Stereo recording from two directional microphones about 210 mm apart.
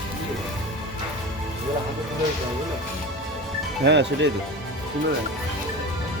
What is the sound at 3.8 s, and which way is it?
Speech, 55° right (ahead or behind).